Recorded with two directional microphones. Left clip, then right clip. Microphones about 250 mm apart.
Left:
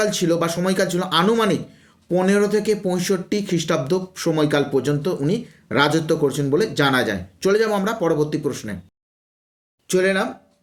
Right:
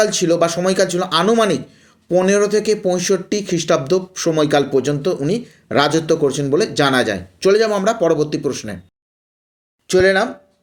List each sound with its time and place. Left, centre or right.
0.0 s speech: centre
9.8 s speech: centre